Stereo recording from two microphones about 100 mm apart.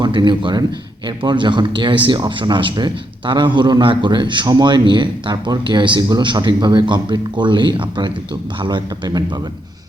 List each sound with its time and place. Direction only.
0.0 s speech: 50° right (ahead or behind)